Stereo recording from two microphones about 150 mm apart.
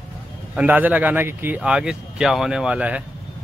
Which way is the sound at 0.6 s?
10° right (ahead or behind).